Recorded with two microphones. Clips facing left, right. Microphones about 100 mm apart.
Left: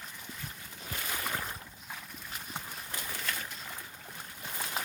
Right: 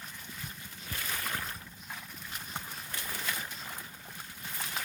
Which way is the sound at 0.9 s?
10° left (ahead or behind).